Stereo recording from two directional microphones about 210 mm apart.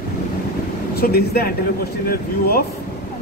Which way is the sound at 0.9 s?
50° left (ahead or behind).